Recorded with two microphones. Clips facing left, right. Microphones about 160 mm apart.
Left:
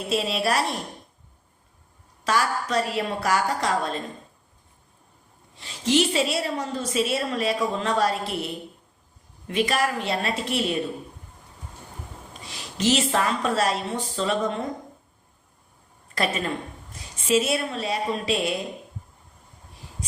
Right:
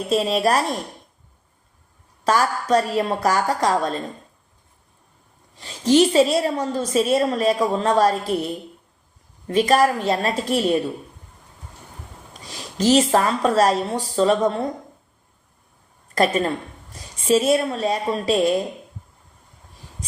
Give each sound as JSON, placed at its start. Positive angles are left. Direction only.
{"t": 0.1, "sound": "a woman's voice", "side_deg": -45}
{"t": 2.2, "sound": "a woman's voice", "side_deg": -40}
{"t": 5.5, "sound": "a woman's voice", "side_deg": -40}
{"t": 9.5, "sound": "a woman's voice", "side_deg": -40}
{"t": 12.3, "sound": "a woman's voice", "side_deg": -40}
{"t": 16.1, "sound": "a woman's voice", "side_deg": -40}